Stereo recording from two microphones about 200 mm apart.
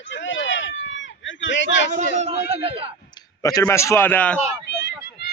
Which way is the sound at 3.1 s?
20° left (ahead or behind).